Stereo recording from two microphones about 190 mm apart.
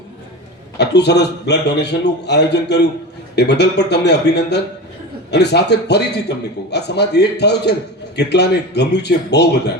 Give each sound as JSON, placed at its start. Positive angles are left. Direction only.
{"t": 0.8, "sound": "a man's voice", "side_deg": 60}